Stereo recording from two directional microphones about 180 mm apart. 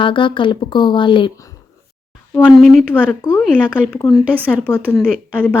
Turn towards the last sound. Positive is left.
turn(degrees=5)  # may be behind; listen again after turning